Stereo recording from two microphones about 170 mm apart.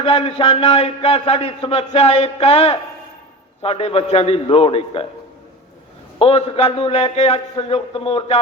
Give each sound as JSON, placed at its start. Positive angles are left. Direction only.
{"t": 0.0, "sound": "a man's voice", "side_deg": 35}
{"t": 6.1, "sound": "a man's voice", "side_deg": 35}